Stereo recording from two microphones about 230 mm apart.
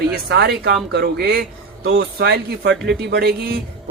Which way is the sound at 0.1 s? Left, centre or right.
Right.